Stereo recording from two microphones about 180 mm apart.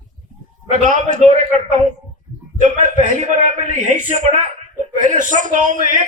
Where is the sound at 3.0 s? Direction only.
45° right (ahead or behind).